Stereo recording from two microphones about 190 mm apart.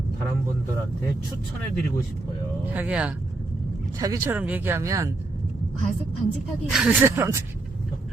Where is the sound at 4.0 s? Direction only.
15° right (ahead or behind).